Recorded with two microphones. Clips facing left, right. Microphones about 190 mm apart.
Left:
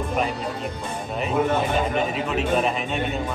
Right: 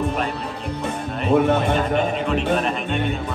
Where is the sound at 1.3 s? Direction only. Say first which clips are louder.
Right 6 dB; 65° right (ahead or behind).